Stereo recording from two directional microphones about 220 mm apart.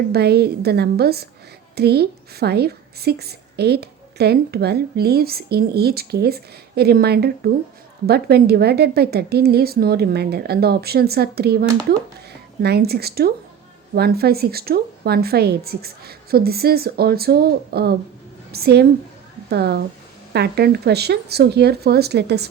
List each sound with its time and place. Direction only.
0.1 s a woman's voice: 45° right (ahead or behind)